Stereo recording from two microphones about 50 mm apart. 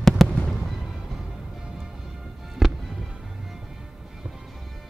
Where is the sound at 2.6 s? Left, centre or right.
Centre.